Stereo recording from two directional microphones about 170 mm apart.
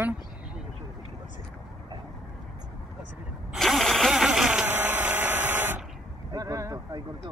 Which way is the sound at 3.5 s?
Centre (ahead or behind).